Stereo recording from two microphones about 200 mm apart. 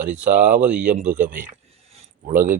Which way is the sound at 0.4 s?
10° right (ahead or behind).